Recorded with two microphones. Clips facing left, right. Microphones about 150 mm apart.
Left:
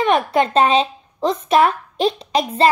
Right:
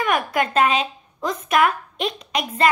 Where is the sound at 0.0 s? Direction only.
30° left (ahead or behind).